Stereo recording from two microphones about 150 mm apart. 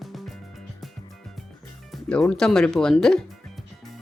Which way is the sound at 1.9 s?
5° left (ahead or behind).